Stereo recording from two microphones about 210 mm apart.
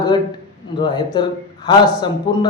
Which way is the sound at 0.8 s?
20° left (ahead or behind).